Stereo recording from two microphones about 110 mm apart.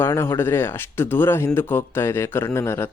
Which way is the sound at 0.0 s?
25° left (ahead or behind).